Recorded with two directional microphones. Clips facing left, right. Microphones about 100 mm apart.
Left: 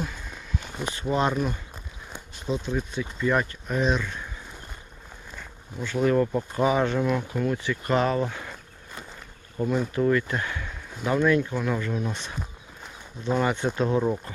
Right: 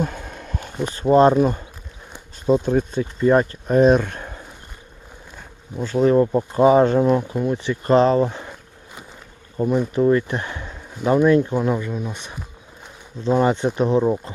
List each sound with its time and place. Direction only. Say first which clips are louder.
0.0 s a sound: right 8 dB; 50° right (ahead or behind)
0.9 s speech: right 11 dB; 40° right (ahead or behind)
2.5 s speech: right 10 dB; 50° right (ahead or behind)
5.4 s a sound: right 7 dB; 40° right (ahead or behind)
6.0 s speech: right 6 dB; 25° right (ahead or behind)
9.6 s speech: right 6 dB; 20° right (ahead or behind)
13.2 s speech: right 6 dB; 25° right (ahead or behind)